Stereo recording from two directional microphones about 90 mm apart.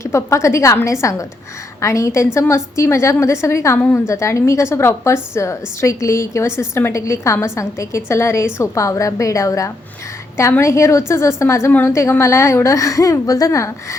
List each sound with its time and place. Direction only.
0.0 s a woman's voice: 30° left (ahead or behind)
3.8 s a woman's voice: 20° left (ahead or behind)
4.0 s a woman's voice: 30° left (ahead or behind)